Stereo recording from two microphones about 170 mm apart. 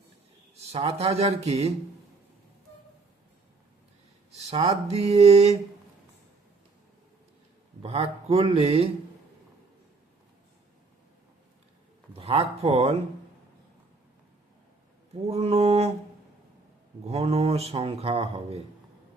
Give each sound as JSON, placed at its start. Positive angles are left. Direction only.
{"t": 0.7, "sound": "speech", "side_deg": -35}
{"t": 4.4, "sound": "speech", "side_deg": -35}
{"t": 7.8, "sound": "speech", "side_deg": -35}
{"t": 12.1, "sound": "speech", "side_deg": -35}
{"t": 15.3, "sound": "speech", "side_deg": -40}
{"t": 17.1, "sound": "speech", "side_deg": -35}